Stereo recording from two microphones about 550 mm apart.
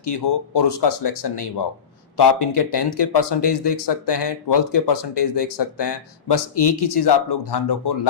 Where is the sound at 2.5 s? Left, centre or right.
Left.